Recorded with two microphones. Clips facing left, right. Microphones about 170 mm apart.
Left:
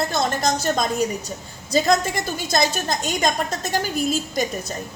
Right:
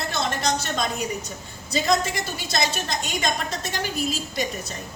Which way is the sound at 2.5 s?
45° left (ahead or behind).